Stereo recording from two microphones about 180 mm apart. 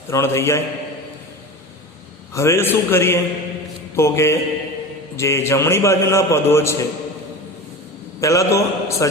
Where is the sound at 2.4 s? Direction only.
15° left (ahead or behind).